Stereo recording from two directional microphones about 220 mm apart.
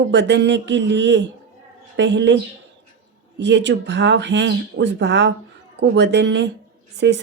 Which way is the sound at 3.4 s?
50° right (ahead or behind).